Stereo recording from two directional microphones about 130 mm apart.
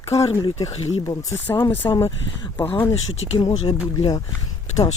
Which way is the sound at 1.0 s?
25° left (ahead or behind).